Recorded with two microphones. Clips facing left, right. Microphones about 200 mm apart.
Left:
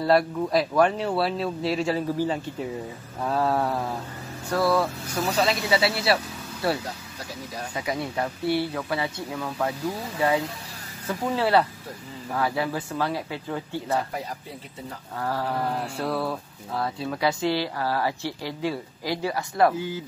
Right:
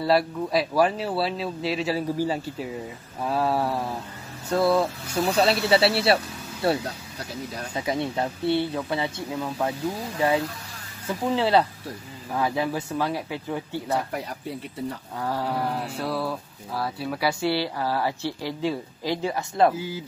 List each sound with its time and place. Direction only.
0.0 s speech: centre (ahead or behind)
4.5 s speech: 25° right (ahead or behind)
5.2 s speech: 35° right (ahead or behind)
11.1 s speech: 20° right (ahead or behind)
15.1 s speech: 10° right (ahead or behind)
16.0 s speech: centre (ahead or behind); by 19.7 s 20° right (ahead or behind)